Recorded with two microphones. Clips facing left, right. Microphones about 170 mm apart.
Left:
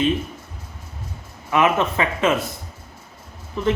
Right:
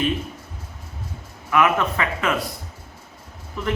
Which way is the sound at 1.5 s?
20° left (ahead or behind).